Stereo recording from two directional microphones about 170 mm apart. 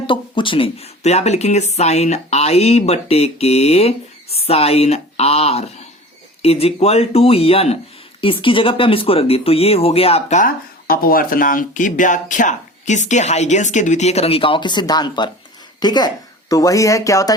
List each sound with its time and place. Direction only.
0.1 s speech: 30° left (ahead or behind)